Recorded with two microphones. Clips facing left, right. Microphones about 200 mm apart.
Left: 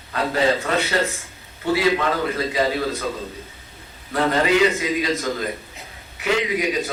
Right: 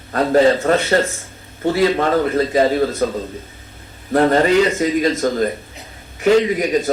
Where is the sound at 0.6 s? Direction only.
45° right (ahead or behind).